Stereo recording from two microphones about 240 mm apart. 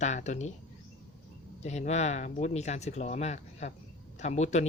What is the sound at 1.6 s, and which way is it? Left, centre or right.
A man's voice, left.